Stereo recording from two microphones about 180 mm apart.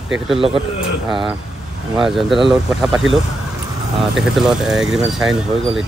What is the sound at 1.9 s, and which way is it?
Speech, centre (ahead or behind).